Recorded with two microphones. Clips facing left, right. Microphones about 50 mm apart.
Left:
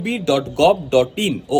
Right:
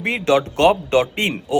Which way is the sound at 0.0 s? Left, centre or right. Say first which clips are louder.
Right 1 dB; right.